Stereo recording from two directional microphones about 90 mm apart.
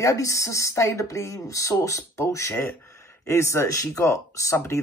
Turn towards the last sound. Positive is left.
turn(degrees=30)  # may be behind; listen again after turning